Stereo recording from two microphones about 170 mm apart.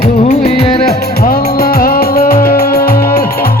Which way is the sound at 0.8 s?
60° left (ahead or behind).